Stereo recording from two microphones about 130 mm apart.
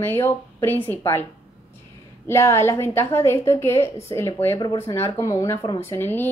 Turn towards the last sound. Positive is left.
turn(degrees=15)  # may be behind; listen again after turning